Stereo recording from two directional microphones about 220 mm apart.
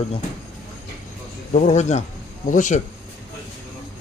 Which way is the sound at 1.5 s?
30° left (ahead or behind).